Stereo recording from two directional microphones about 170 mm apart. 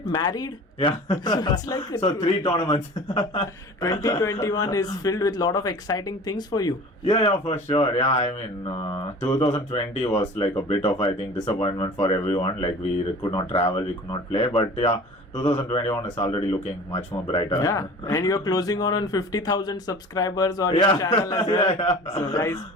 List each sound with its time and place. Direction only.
0.1 s speech: 25° left (ahead or behind)
3.8 s speech: 20° left (ahead or behind)
7.1 s speech: 35° left (ahead or behind)
16.1 s speech: 35° left (ahead or behind)
17.5 s speech: 20° left (ahead or behind)
21.7 s speech: 40° left (ahead or behind)
22.2 s a man's voice: 15° left (ahead or behind)